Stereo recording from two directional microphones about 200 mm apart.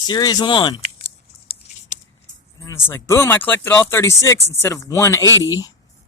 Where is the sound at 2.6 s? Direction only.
15° left (ahead or behind).